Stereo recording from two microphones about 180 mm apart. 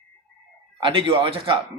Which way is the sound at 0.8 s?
30° right (ahead or behind).